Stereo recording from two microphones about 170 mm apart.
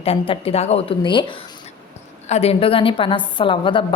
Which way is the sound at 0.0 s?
35° left (ahead or behind).